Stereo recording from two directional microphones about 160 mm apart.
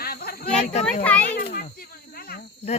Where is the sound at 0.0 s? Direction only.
65° left (ahead or behind).